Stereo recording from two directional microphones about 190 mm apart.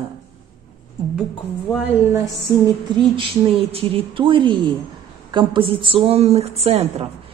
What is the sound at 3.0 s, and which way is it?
A woman's voice, 25° right (ahead or behind).